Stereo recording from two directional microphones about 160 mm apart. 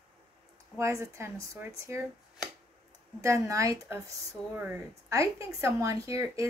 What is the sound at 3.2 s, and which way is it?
Speech, 20° right (ahead or behind).